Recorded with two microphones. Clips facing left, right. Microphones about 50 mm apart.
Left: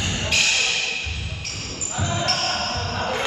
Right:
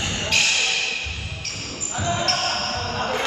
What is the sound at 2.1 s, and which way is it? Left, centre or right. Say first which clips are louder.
Basketball bounce: right 1 dB; centre.